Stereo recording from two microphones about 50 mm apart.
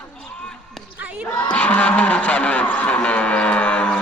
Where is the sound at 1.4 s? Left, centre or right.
Left.